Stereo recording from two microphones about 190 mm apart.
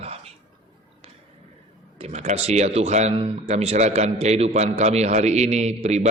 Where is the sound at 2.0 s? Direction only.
35° right (ahead or behind).